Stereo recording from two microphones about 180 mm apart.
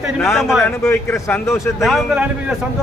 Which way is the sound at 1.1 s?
15° left (ahead or behind).